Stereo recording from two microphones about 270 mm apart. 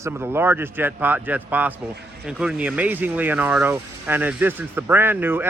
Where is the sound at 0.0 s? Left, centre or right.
Centre.